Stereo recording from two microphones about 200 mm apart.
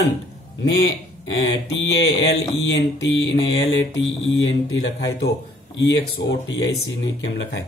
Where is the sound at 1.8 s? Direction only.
60° left (ahead or behind).